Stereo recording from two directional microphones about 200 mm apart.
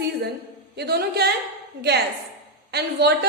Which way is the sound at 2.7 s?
55° right (ahead or behind).